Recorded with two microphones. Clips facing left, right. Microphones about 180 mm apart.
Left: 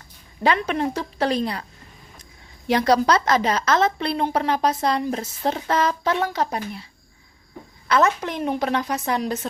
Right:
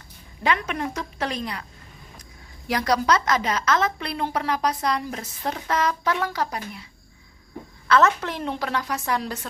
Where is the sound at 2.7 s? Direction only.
30° left (ahead or behind).